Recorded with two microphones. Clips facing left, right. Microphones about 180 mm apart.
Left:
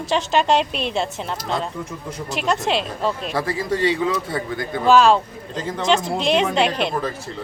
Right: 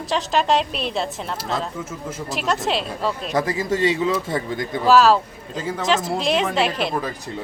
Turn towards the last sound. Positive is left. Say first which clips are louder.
# left 2 dB
turn(degrees=0)  # may be behind; listen again after turning